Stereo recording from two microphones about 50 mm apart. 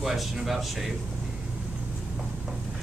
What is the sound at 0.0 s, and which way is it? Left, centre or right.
Speech, centre.